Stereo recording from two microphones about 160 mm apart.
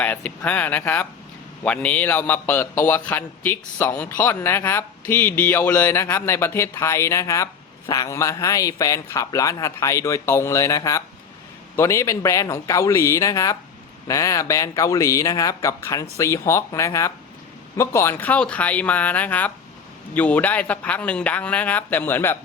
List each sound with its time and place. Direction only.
0.0 s a man's voice: 10° left (ahead or behind)